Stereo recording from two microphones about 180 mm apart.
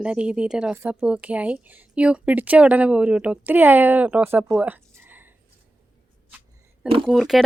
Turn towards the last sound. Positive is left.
turn(degrees=0)  # may be behind; listen again after turning